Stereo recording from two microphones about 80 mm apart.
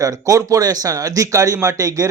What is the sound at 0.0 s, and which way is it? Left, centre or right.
Speech, right.